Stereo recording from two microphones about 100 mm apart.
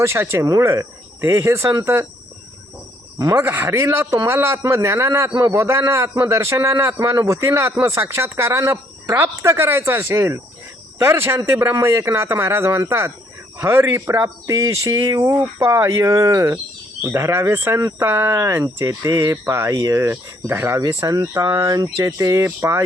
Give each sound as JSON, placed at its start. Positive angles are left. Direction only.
{"t": 0.0, "sound": "speech", "side_deg": -25}
{"t": 3.3, "sound": "speech", "side_deg": -20}